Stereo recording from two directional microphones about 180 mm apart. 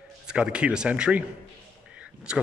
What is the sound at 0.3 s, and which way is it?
Speech, 5° right (ahead or behind).